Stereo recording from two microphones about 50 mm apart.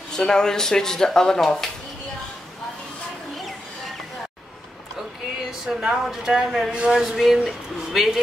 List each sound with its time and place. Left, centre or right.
0.1 s speech: centre
5.7 s speech: centre